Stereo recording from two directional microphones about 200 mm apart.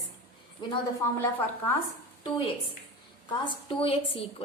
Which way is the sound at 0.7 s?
15° left (ahead or behind).